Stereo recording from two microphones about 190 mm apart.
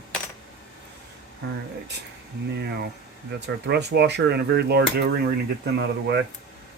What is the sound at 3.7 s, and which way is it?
Speech, 60° right (ahead or behind).